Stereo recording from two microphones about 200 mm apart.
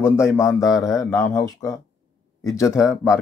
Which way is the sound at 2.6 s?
5° right (ahead or behind).